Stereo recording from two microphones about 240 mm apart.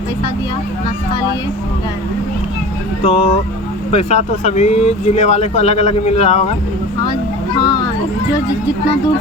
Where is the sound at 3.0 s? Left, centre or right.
Left.